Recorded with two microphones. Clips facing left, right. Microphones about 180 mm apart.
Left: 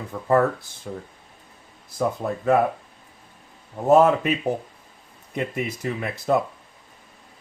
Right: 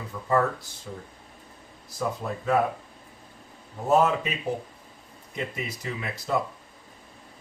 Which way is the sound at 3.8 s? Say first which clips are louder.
Left 6 dB; 55° left (ahead or behind).